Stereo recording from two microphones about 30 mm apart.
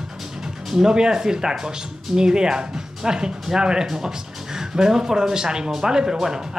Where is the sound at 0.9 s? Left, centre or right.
Right.